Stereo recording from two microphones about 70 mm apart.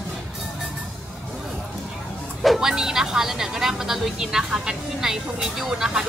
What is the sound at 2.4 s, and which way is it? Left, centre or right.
Speech, centre.